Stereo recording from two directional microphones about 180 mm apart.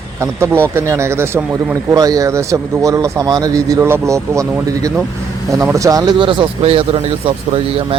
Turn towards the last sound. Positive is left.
turn(degrees=-30)  # may be behind; listen again after turning